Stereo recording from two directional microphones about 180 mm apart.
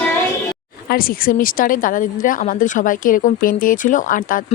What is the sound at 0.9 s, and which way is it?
Speech, 55° left (ahead or behind).